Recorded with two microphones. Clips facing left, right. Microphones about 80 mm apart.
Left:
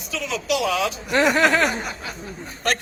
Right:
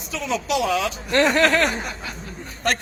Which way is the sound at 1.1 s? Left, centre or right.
Centre.